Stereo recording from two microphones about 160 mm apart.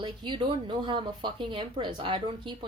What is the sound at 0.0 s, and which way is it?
Speech, 30° right (ahead or behind).